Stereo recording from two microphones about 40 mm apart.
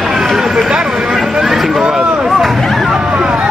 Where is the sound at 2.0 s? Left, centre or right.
Right.